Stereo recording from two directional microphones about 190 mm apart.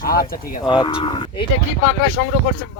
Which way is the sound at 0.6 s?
25° left (ahead or behind).